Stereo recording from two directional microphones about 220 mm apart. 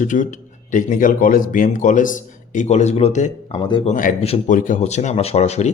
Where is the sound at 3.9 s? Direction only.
35° left (ahead or behind).